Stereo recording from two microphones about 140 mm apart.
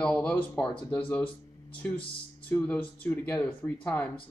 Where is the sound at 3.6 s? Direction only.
15° left (ahead or behind).